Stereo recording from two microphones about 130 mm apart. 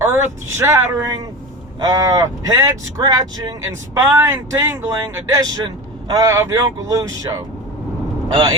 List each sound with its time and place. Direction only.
0.0 s speech: 20° right (ahead or behind)
3.9 s speech: 20° right (ahead or behind)
5.4 s speech: 30° right (ahead or behind)